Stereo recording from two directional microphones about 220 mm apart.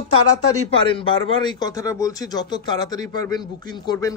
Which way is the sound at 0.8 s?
20° left (ahead or behind).